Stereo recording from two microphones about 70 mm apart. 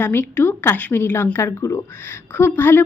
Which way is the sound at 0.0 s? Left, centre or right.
Left.